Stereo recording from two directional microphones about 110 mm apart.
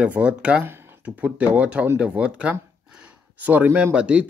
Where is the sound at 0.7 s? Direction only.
20° right (ahead or behind).